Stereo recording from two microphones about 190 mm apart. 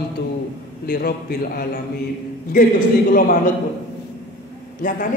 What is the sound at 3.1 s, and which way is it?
Speech, 50° left (ahead or behind).